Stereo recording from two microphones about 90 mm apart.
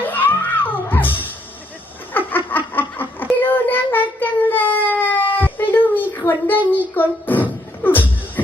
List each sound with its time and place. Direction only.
0.0 s music: 20° left (ahead or behind)
2.1 s a sound: 20° left (ahead or behind)
4.2 s baby cry: 20° left (ahead or behind)
7.8 s music: 20° left (ahead or behind)